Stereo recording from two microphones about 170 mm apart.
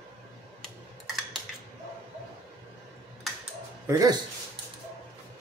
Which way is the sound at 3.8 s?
20° right (ahead or behind).